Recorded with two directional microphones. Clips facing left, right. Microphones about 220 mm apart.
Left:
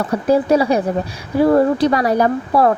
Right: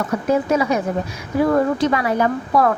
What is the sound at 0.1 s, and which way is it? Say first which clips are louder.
A woman's voice: left 5 dB; 35° left (ahead or behind).